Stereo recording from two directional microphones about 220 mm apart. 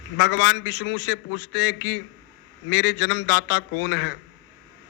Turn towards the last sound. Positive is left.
turn(degrees=55)  # may be behind; listen again after turning